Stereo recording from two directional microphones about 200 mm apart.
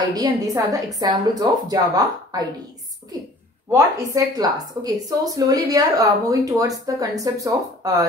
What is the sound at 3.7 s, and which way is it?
A woman's voice, 15° right (ahead or behind).